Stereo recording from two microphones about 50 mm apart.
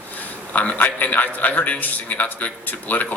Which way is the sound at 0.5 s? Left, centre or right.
Left.